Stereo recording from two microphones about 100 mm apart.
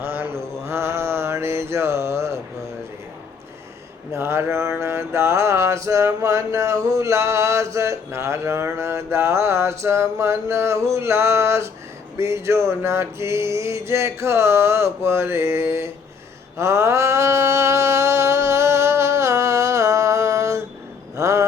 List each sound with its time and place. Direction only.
0.0 s mantra: 20° right (ahead or behind)
4.1 s mantra: 25° right (ahead or behind)
21.2 s a sound: 30° right (ahead or behind)